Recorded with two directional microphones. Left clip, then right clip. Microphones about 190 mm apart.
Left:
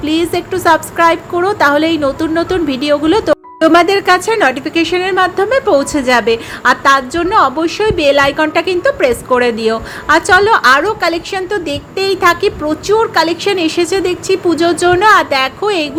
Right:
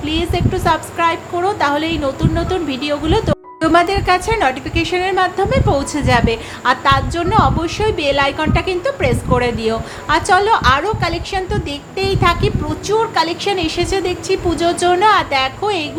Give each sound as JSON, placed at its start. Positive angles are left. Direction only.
{"t": 0.0, "sound": "a woman's voice", "side_deg": 25}